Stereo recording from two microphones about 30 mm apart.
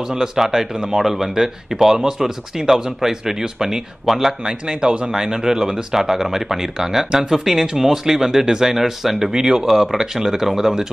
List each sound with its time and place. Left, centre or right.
0.5 s speech: centre
4.5 s speech: right
5.9 s speech: centre
9.6 s speech: centre